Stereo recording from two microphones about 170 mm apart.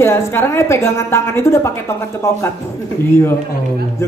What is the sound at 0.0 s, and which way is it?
Speech, 15° left (ahead or behind).